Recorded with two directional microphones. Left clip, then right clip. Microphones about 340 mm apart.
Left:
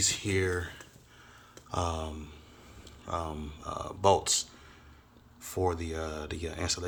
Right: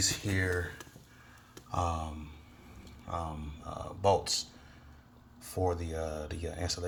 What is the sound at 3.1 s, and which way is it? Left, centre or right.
Speech, centre.